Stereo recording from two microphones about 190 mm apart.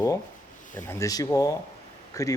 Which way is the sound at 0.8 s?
15° left (ahead or behind).